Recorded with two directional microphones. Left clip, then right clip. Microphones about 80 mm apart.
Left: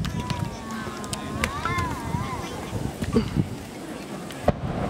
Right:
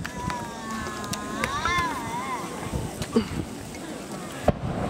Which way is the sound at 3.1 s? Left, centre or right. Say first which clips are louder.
Even; centre.